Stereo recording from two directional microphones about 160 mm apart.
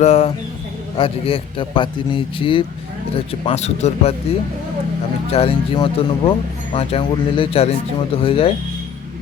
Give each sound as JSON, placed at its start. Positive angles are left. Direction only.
{"t": 0.0, "sound": "a man's voice", "side_deg": 45}
{"t": 5.3, "sound": "a man's voice", "side_deg": 40}